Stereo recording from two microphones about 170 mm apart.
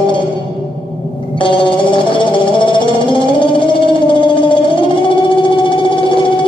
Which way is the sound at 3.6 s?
30° left (ahead or behind).